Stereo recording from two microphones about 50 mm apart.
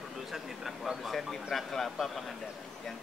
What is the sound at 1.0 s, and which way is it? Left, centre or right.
Speech, centre.